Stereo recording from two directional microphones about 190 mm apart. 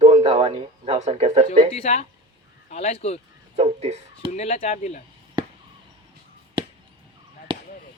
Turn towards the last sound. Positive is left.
turn(degrees=-25)  # may be behind; listen again after turning